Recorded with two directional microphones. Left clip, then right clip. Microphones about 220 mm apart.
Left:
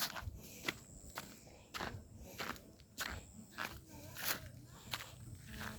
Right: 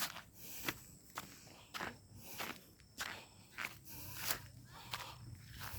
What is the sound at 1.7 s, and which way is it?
Cricket, 5° left (ahead or behind).